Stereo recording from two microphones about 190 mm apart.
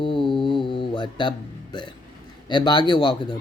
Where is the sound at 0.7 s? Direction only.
25° left (ahead or behind).